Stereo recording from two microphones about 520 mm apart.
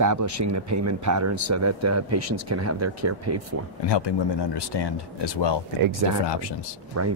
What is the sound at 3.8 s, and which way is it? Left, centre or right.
Speech, left.